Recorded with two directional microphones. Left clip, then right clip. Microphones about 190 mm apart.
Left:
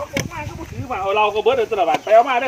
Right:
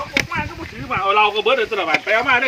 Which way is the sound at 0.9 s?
10° right (ahead or behind).